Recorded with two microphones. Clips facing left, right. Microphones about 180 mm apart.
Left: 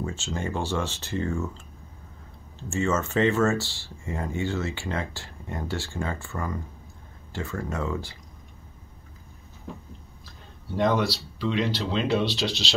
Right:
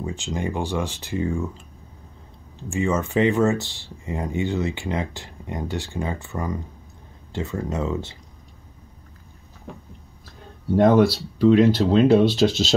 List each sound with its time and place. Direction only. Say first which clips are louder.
0.0 s speech: right 3 dB; 15° right (ahead or behind)
2.7 s speech: right 3 dB; 15° right (ahead or behind)
9.7 s a sound: even; 65° right (ahead or behind)
10.8 s speech: right 8 dB; 50° right (ahead or behind)